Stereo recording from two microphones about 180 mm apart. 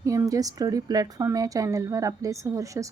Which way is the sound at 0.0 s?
20° right (ahead or behind).